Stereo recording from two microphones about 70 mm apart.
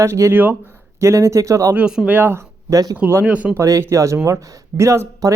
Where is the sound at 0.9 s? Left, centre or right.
Right.